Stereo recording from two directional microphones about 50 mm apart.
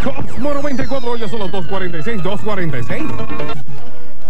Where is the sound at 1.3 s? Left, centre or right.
Centre.